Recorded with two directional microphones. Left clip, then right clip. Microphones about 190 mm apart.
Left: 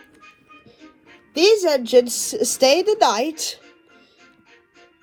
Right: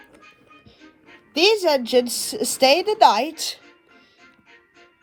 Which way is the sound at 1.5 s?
55° right (ahead or behind).